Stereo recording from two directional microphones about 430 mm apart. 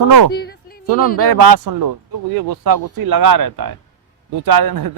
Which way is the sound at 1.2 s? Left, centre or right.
Right.